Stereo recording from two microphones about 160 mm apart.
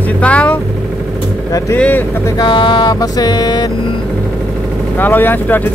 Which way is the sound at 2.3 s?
30° left (ahead or behind).